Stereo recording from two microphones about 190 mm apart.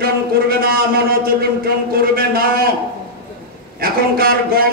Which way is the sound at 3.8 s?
50° right (ahead or behind).